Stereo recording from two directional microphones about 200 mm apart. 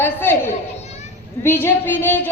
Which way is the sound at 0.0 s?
10° left (ahead or behind).